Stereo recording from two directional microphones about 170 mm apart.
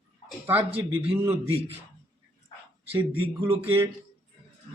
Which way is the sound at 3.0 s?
30° right (ahead or behind).